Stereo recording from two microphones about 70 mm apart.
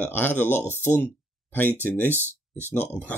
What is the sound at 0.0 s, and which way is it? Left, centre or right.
Speech, left.